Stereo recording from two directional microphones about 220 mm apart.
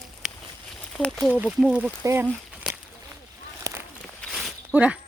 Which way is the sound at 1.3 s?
5° right (ahead or behind).